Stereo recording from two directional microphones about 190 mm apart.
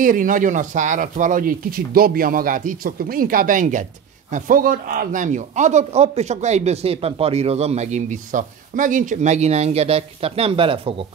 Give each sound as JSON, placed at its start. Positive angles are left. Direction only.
{"t": 0.0, "sound": "a man's voice", "side_deg": -45}